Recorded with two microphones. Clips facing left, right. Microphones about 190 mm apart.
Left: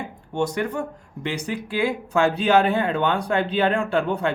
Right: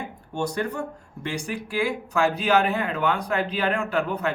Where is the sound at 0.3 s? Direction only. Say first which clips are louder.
Left 3 dB; 20° left (ahead or behind).